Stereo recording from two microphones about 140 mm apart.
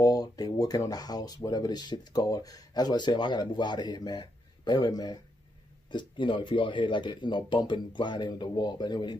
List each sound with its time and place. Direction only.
0.0 s speech: 25° left (ahead or behind)